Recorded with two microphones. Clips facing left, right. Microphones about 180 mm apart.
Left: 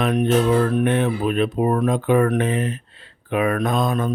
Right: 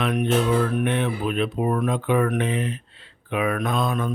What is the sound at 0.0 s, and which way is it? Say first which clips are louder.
Speech: left 4 dB; 35° left (ahead or behind).